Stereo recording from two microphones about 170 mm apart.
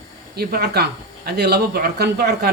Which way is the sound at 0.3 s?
70° right (ahead or behind).